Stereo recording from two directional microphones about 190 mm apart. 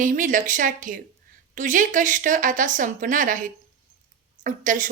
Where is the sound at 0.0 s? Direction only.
45° right (ahead or behind).